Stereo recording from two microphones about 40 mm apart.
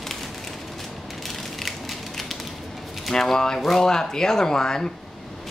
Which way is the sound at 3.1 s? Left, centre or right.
Centre.